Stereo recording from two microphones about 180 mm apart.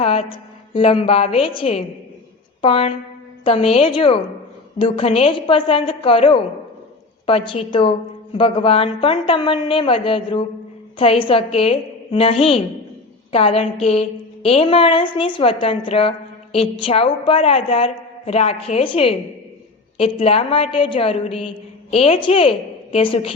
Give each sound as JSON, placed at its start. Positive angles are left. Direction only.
{"t": 0.0, "sound": "a woman's voice", "side_deg": 30}